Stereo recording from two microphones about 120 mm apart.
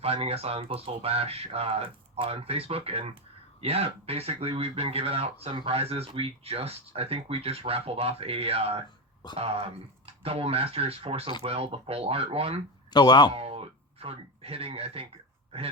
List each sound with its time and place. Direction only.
0.0 s speech: 55° right (ahead or behind)
12.9 s speech: 35° left (ahead or behind)
13.3 s speech: 55° right (ahead or behind)